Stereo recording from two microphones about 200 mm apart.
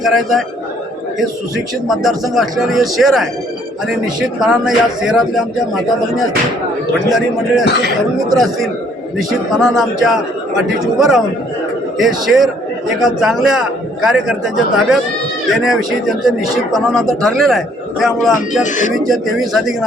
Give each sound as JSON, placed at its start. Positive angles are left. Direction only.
{"t": 0.0, "sound": "speech", "side_deg": 0}
{"t": 1.9, "sound": "speech", "side_deg": 0}
{"t": 7.1, "sound": "speech", "side_deg": 0}
{"t": 7.6, "sound": "speech", "side_deg": 55}
{"t": 8.4, "sound": "speech", "side_deg": 0}
{"t": 18.6, "sound": "speech", "side_deg": 40}
{"t": 18.9, "sound": "speech", "side_deg": 0}